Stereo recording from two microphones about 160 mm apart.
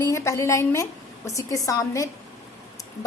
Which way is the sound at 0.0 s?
20° left (ahead or behind).